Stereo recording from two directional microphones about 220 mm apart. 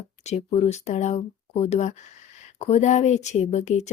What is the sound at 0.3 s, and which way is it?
Speech, 30° left (ahead or behind).